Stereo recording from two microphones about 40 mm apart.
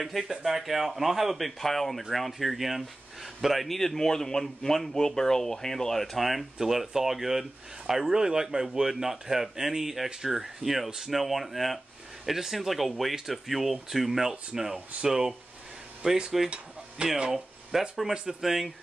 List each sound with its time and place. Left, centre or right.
0.0 s a man's voice: centre
6.1 s speech: centre
14.3 s speech: centre
17.3 s a sound: centre
18.4 s speech: centre